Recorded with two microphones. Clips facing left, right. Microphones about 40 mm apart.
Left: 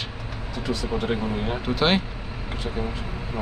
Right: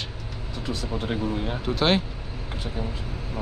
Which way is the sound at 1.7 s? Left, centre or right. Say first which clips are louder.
Even; centre.